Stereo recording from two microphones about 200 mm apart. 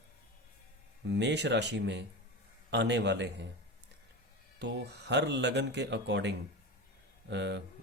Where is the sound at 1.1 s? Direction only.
60° right (ahead or behind).